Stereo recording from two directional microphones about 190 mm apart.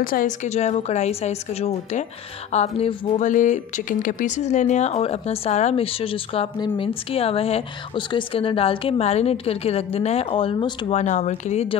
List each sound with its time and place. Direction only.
0.0 s speech: 45° left (ahead or behind); by 11.0 s 25° left (ahead or behind)
11.0 s speech: 40° left (ahead or behind)